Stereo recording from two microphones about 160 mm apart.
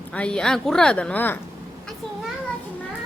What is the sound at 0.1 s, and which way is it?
Speech, 5° left (ahead or behind).